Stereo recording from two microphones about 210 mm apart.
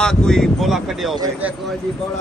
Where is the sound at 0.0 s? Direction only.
5° left (ahead or behind).